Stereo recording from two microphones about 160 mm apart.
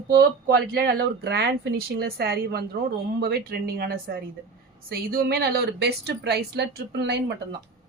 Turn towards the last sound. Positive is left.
turn(degrees=-90)